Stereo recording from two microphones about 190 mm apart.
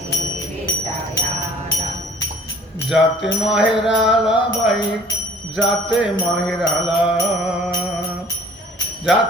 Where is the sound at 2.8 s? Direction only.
Centre (ahead or behind).